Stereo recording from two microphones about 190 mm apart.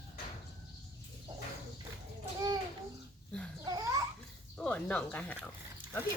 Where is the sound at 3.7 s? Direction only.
20° right (ahead or behind).